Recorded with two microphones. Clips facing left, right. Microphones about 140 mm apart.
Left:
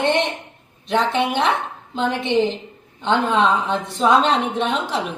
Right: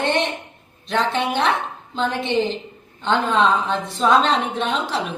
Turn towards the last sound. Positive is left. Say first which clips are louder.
# left 1 dB
turn(degrees=15)  # may be behind; listen again after turning